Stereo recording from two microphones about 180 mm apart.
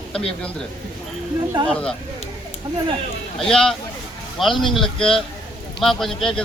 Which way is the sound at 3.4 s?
5° left (ahead or behind).